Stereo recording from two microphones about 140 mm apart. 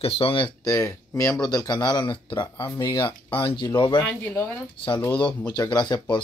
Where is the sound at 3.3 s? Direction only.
35° left (ahead or behind).